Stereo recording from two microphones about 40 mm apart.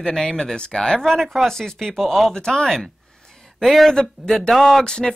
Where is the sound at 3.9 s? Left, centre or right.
Centre.